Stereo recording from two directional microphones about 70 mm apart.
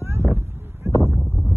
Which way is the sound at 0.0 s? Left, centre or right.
Right.